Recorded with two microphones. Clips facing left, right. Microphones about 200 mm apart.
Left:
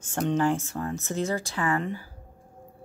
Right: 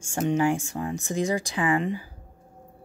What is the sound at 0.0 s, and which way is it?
Speech, 10° right (ahead or behind).